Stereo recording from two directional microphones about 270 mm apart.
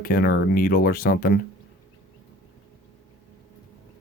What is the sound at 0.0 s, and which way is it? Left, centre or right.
Speech, left.